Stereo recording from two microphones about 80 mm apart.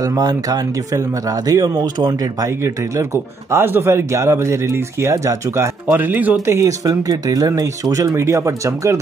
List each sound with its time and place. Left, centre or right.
0.0 s speech: right
2.4 s a man's voice: right
5.9 s speech: right
6.4 s speech: right